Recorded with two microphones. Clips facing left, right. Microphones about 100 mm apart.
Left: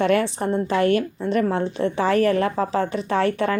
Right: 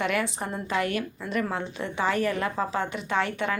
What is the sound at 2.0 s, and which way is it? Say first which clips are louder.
Speech: left 6 dB; 90° left.